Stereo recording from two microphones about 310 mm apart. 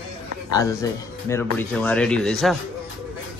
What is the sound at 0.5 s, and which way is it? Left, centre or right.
A man's voice, centre.